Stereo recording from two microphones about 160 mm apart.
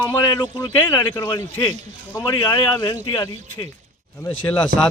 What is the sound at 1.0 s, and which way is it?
A man's voice, 25° left (ahead or behind).